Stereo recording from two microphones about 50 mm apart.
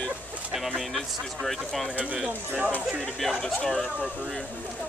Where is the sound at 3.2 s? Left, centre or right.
Centre.